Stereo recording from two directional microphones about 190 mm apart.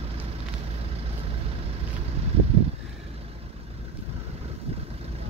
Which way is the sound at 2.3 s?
35° right (ahead or behind).